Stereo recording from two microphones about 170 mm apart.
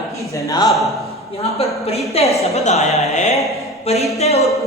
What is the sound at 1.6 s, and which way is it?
A woman's voice, 35° left (ahead or behind).